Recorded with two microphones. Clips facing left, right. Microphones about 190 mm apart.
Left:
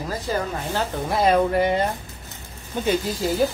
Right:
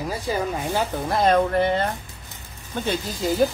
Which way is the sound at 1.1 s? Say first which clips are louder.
Even; 10° left (ahead or behind).